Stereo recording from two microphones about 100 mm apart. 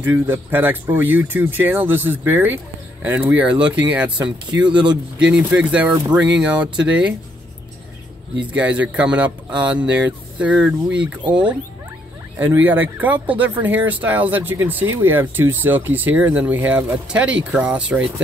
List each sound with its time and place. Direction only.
0.0 s speech: 20° right (ahead or behind)
8.4 s speech: 15° right (ahead or behind)